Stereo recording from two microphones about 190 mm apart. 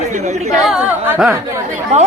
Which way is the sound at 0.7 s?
5° right (ahead or behind).